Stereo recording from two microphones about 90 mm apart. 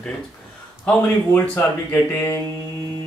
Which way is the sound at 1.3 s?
25° left (ahead or behind).